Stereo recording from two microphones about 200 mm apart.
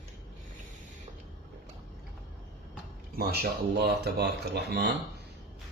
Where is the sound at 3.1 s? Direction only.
50° right (ahead or behind).